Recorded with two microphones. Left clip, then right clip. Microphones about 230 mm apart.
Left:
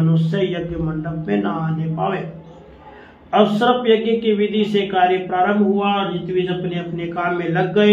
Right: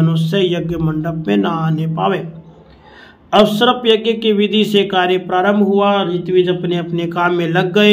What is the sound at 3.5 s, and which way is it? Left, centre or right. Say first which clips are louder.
Speech: right 3 dB; right.